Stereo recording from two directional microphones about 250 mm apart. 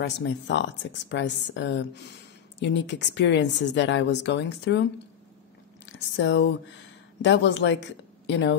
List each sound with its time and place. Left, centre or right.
0.0 s speech: left
5.9 s speech: left